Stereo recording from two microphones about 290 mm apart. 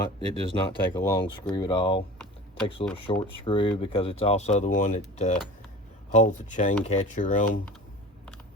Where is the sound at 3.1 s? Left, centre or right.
Centre.